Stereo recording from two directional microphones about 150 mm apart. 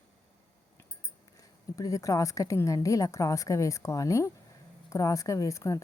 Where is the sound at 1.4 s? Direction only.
25° left (ahead or behind).